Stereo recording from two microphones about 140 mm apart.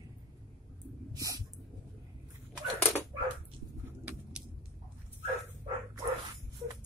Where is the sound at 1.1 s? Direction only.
25° right (ahead or behind).